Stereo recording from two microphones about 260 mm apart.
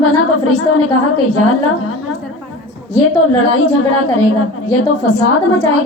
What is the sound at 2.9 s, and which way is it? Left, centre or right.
A woman's voice, left.